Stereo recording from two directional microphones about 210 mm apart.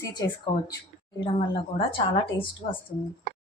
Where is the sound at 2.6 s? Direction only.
25° left (ahead or behind).